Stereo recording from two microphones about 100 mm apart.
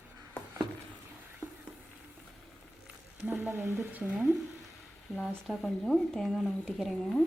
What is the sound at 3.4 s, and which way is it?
Speech, 25° right (ahead or behind).